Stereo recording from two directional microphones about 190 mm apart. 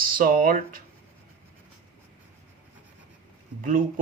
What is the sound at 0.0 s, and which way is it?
Speech, 45° right (ahead or behind).